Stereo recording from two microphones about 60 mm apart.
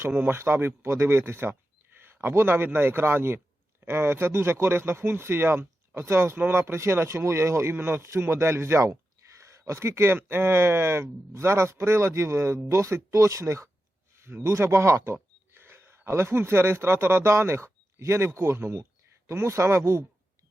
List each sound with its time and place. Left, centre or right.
0.2 s a man's voice: right